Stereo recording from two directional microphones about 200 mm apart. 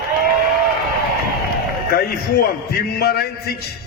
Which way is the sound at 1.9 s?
50° left (ahead or behind).